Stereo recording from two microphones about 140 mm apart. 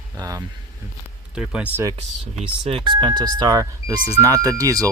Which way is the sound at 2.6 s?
35° right (ahead or behind).